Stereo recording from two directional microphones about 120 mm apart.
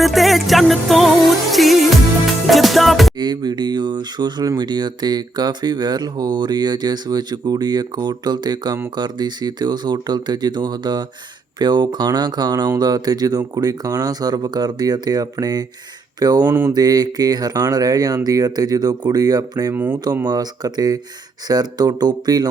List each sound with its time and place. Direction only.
0.0 s music: centre (ahead or behind)
3.2 s speech: 35° right (ahead or behind)
16.5 s a sound: 10° right (ahead or behind)
16.7 s speech: 35° right (ahead or behind)
19.7 s a sound: 15° right (ahead or behind)
20.2 s speech: 35° right (ahead or behind)